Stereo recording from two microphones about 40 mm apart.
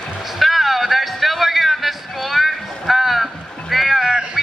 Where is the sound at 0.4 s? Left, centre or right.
Centre.